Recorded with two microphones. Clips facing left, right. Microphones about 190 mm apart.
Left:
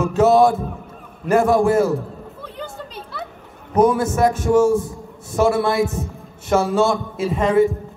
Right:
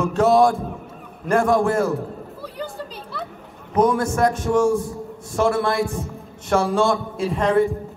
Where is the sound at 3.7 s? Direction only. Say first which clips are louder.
Left 2 dB; 5° left (ahead or behind).